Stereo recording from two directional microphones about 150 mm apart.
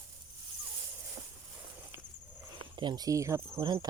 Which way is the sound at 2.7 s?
30° right (ahead or behind).